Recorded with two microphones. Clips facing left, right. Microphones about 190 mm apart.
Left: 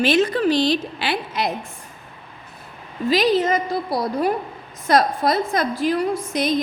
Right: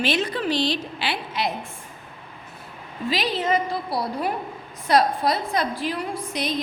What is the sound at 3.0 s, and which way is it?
A woman's voice, 40° left (ahead or behind).